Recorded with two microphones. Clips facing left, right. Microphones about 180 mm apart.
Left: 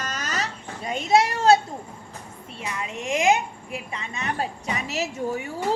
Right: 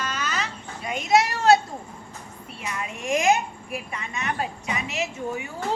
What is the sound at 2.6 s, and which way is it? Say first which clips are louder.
A woman's voice: left 1 dB; 25° left (ahead or behind).